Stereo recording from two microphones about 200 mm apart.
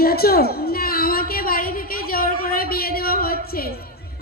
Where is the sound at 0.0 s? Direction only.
50° left (ahead or behind).